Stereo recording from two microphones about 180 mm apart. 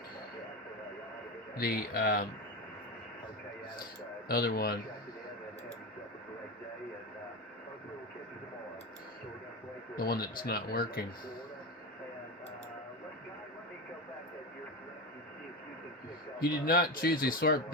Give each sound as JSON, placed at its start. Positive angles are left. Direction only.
{"t": 1.5, "sound": "speech", "side_deg": 55}
{"t": 4.3, "sound": "speech", "side_deg": 60}
{"t": 9.9, "sound": "speech", "side_deg": 55}
{"t": 16.4, "sound": "speech", "side_deg": 55}